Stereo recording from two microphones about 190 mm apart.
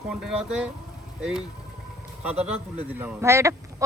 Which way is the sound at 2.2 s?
5° right (ahead or behind).